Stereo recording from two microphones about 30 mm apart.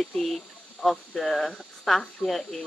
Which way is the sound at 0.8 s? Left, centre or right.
Centre.